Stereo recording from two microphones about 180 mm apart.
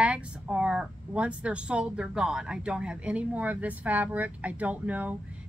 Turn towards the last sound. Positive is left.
turn(degrees=-10)  # may be behind; listen again after turning